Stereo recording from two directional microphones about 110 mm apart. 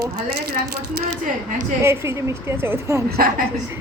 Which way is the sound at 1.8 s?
25° right (ahead or behind).